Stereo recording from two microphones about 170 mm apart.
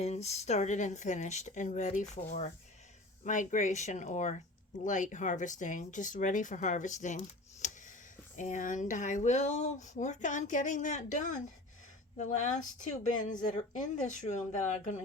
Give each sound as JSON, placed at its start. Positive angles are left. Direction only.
{"t": 0.0, "sound": "speech", "side_deg": 40}
{"t": 3.2, "sound": "speech", "side_deg": 50}